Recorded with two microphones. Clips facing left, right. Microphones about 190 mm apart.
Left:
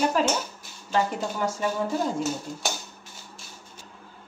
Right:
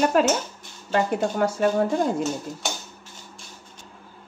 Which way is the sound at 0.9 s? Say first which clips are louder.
Right 3 dB; 60° right (ahead or behind).